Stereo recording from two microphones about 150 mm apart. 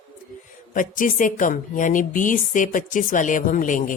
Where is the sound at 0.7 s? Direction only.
60° left (ahead or behind).